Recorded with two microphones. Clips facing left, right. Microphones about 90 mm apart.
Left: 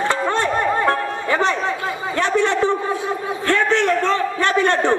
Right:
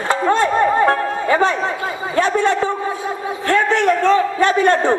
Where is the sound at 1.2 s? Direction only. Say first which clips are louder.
Right 4 dB; 25° right (ahead or behind).